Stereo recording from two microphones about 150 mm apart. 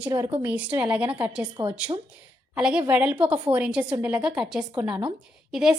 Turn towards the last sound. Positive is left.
turn(degrees=-5)  # may be behind; listen again after turning